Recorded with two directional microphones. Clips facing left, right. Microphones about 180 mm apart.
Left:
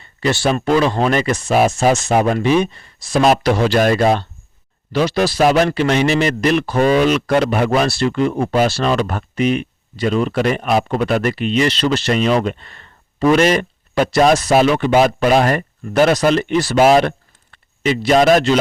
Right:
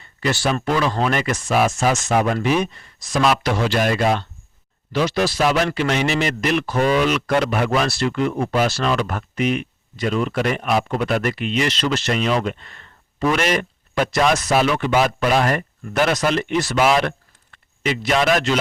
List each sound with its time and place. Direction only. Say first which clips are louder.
0.2 s speech: left 4 dB; 25° left (ahead or behind)